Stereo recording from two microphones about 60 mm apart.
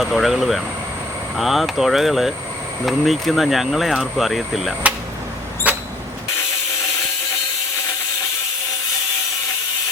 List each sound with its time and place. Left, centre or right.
0.0 s speech: centre
5.7 s vehicle: right